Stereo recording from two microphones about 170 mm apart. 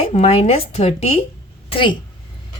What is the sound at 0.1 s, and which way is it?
A woman's voice, 40° left (ahead or behind).